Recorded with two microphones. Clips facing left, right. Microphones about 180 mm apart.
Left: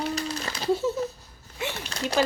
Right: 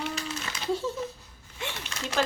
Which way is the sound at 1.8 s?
35° left (ahead or behind).